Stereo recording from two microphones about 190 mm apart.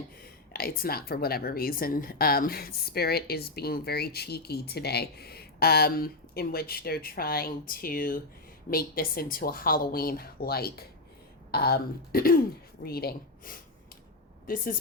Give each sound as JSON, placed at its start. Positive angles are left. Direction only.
{"t": 0.2, "sound": "a woman's voice", "side_deg": 55}